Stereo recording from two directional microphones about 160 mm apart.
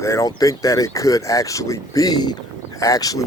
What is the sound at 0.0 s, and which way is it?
Speech, 20° left (ahead or behind).